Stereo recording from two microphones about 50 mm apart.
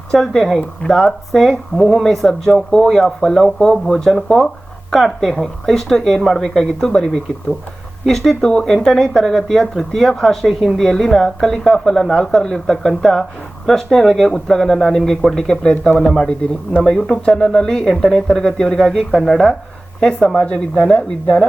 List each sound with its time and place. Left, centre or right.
0.1 s speech: centre
8.7 s speech: centre
20.1 s speech: left